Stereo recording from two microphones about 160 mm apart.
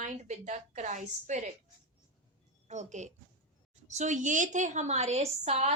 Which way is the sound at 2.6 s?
45° right (ahead or behind).